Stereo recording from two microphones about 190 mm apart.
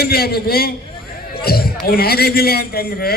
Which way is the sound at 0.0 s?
55° left (ahead or behind).